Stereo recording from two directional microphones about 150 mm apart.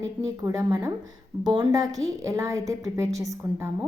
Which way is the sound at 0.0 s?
20° right (ahead or behind).